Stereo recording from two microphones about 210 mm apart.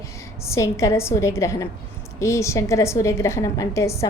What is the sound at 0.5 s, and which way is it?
A woman's voice, 15° left (ahead or behind).